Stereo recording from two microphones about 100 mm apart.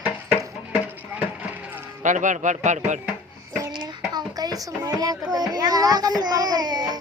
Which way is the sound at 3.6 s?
40° right (ahead or behind).